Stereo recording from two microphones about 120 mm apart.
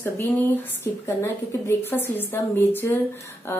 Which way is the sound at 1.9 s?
15° left (ahead or behind).